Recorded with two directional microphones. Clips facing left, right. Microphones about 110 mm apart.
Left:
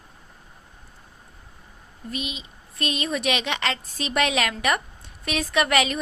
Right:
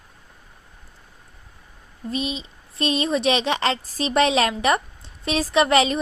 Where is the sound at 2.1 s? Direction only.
35° right (ahead or behind).